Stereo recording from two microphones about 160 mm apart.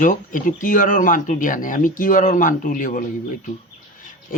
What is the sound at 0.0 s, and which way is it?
Speech, 55° left (ahead or behind).